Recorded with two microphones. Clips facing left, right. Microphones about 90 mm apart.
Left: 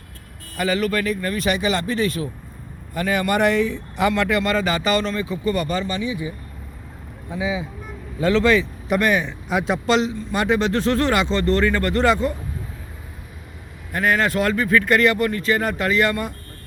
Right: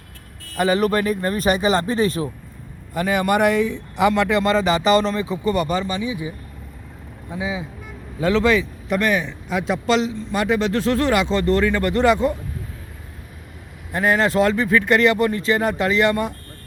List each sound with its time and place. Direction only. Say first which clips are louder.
0.5 s speech: right 3 dB; 35° right (ahead or behind)
2.9 s a man's voice: right 2 dB; 15° right (ahead or behind)
7.3 s a man's voice: left 2 dB; centre (ahead or behind)
8.9 s speech: left 1 dB; 5° left (ahead or behind); by 12.3 s 15° right (ahead or behind)
13.9 s speech: right 2 dB; 20° right (ahead or behind)